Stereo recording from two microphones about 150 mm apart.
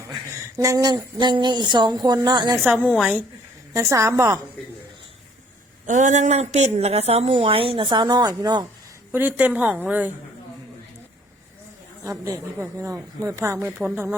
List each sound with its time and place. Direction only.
0.1 s a woman's voice: 20° right (ahead or behind)
2.9 s a woman's voice: 5° right (ahead or behind)
3.7 s a woman's voice: 20° right (ahead or behind)
5.8 s a woman's voice: 55° right (ahead or behind); by 8.6 s 30° right (ahead or behind)
9.1 s a woman's voice: 10° right (ahead or behind)
12.2 s a woman's voice: 20° right (ahead or behind)